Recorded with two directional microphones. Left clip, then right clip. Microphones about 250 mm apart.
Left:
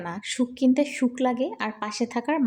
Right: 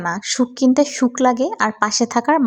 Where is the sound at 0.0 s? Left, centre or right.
Right.